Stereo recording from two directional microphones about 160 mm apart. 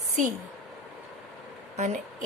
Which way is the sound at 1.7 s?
50° right (ahead or behind).